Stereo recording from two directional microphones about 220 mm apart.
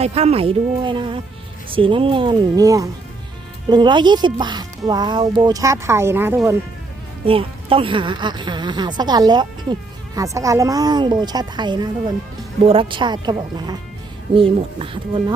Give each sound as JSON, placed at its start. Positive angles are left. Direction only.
{"t": 0.0, "sound": "speech", "side_deg": -30}
{"t": 7.3, "sound": "speech", "side_deg": -25}